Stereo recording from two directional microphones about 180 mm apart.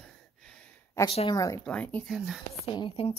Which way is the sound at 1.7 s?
10° left (ahead or behind).